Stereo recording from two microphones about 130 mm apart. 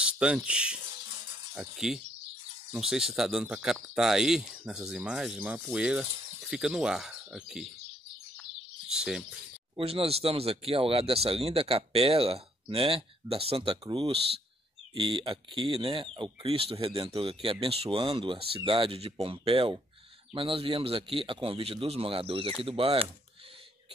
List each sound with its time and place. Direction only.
0.0 s speech: 5° right (ahead or behind)
8.4 s bird: 5° right (ahead or behind)
9.8 s speech: 50° right (ahead or behind)